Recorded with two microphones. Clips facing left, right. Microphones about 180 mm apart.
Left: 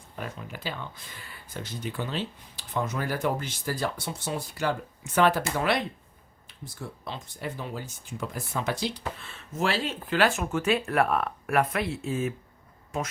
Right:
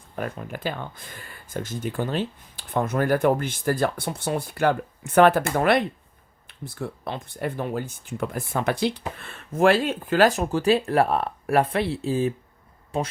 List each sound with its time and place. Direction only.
0.2 s speech: 55° right (ahead or behind); by 13.1 s 30° right (ahead or behind)